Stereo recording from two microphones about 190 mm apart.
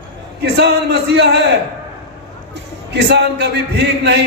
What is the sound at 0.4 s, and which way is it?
Speech, 60° right (ahead or behind).